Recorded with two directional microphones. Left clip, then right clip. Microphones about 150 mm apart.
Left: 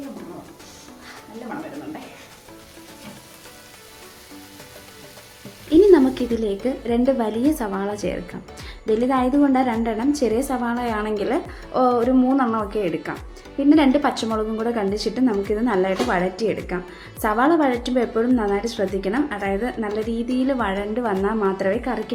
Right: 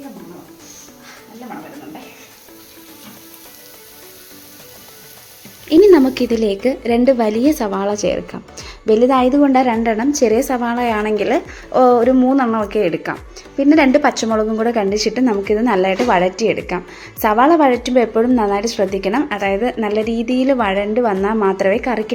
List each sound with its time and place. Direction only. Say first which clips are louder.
5.6 s a woman's voice: right 4 dB; 25° right (ahead or behind)